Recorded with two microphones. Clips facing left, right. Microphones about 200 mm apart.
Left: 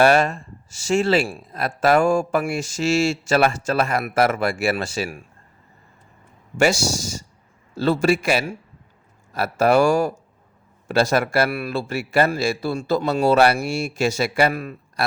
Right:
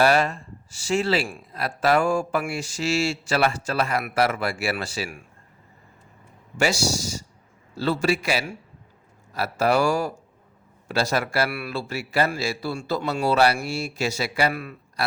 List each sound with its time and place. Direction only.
0.0 s speech: 45° left (ahead or behind)
6.6 s speech: 50° left (ahead or behind)